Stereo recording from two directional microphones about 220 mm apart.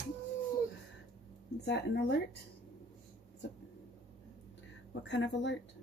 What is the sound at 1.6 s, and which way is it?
Speech, 50° left (ahead or behind).